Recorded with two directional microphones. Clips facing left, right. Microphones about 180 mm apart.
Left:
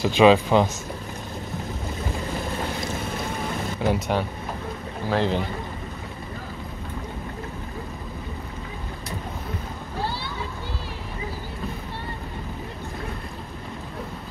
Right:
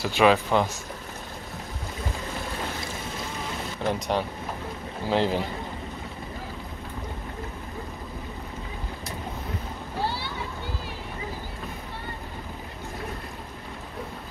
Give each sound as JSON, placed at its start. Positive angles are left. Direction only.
{"t": 0.0, "sound": "speech", "side_deg": 20}
{"t": 3.8, "sound": "speech", "side_deg": 5}
{"t": 5.0, "sound": "speech", "side_deg": -15}